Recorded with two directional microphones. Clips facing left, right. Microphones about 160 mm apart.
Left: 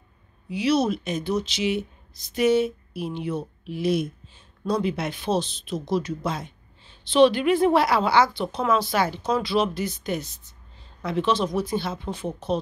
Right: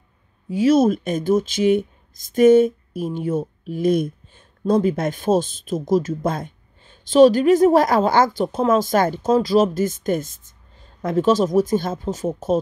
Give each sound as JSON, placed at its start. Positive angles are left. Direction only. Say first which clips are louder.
{"t": 0.5, "sound": "speech", "louder": "right 7 dB", "side_deg": -45}